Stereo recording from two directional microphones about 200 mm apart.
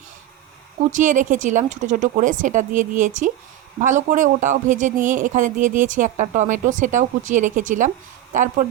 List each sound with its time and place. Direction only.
0.9 s speech: 40° right (ahead or behind)